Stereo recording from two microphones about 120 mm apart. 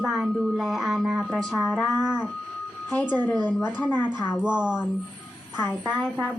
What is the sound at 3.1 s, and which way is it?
A child's voice, 15° left (ahead or behind).